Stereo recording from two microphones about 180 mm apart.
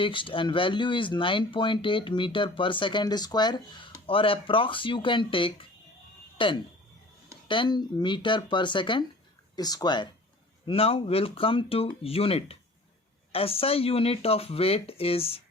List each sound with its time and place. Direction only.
0.0 s speech: 30° left (ahead or behind)